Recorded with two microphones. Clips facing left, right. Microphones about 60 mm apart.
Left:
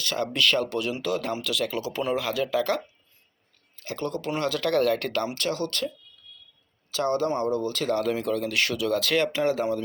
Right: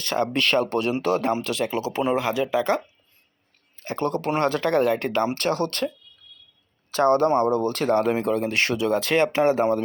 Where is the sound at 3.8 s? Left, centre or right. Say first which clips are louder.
Right 5 dB; right.